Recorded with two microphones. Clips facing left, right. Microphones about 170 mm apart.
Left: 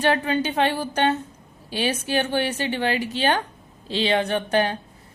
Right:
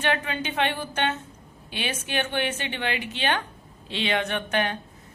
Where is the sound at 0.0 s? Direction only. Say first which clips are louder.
Left 6 dB; 35° left (ahead or behind).